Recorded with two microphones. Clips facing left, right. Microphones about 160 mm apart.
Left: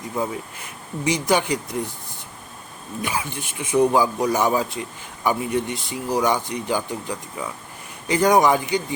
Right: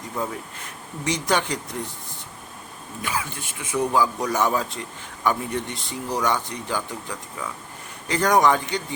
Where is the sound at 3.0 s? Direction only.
15° left (ahead or behind).